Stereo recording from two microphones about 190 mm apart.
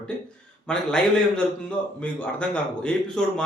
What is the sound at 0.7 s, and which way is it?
Speech, 5° left (ahead or behind).